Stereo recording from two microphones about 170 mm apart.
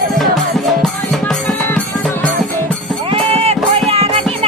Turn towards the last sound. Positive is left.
turn(degrees=-35)  # may be behind; listen again after turning